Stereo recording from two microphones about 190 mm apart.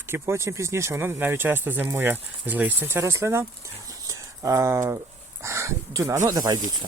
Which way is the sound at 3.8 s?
15° right (ahead or behind).